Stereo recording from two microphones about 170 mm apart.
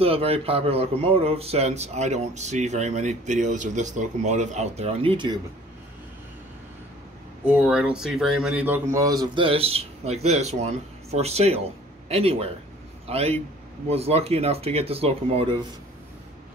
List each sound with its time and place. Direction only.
0.0 s a man's voice: 35° right (ahead or behind)
7.4 s a man's voice: 10° right (ahead or behind); by 15.6 s 30° right (ahead or behind)